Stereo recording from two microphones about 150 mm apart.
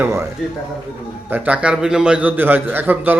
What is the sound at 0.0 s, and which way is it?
Speech, 20° right (ahead or behind).